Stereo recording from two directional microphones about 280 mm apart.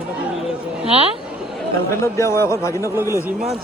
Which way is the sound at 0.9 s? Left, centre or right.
Right.